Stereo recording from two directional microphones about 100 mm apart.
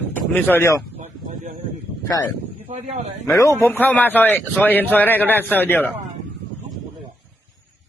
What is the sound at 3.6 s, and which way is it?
A man's voice, 20° left (ahead or behind).